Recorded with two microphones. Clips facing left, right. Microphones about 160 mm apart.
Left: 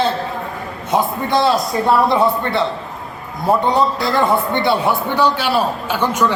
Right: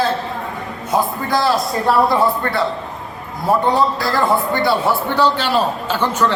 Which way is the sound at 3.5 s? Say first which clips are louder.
Even; 20° left (ahead or behind).